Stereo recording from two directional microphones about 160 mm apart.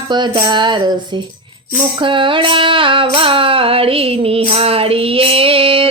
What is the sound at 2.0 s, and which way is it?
Music, 30° right (ahead or behind).